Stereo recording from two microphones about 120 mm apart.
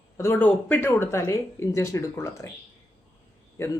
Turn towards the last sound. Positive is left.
turn(degrees=20)  # may be behind; listen again after turning